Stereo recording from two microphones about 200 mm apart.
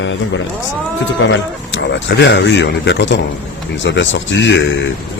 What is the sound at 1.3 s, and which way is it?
Speech, 65° left (ahead or behind).